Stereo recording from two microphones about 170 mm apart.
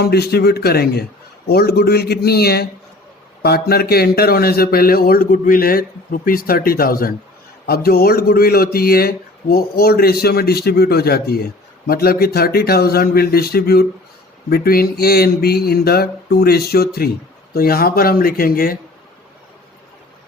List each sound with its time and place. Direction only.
0.0 s a man's voice: 70° left (ahead or behind)